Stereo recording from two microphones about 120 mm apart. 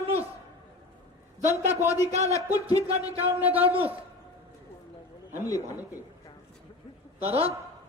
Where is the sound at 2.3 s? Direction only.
30° left (ahead or behind).